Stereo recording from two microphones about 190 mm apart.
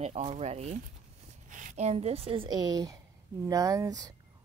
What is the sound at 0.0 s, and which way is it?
A woman's voice, 35° right (ahead or behind).